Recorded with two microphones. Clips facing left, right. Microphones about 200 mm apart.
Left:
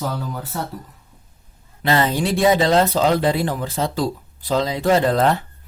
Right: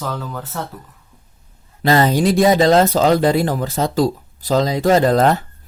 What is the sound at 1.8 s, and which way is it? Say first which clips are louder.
Speech: right 5 dB; 40° right (ahead or behind).